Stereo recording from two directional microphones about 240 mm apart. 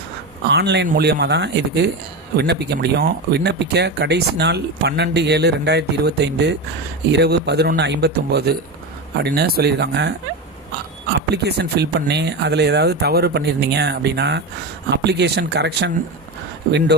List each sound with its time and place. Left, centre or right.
0.5 s speech: right
11.3 s speech: right